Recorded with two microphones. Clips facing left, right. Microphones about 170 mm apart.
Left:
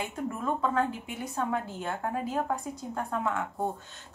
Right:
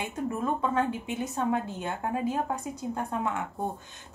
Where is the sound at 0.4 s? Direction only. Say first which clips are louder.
Even; 20° right (ahead or behind).